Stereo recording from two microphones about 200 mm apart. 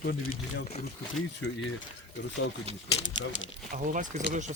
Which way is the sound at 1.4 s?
60° left (ahead or behind).